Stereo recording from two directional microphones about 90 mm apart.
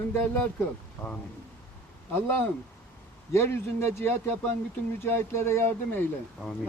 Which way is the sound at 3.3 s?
30° left (ahead or behind).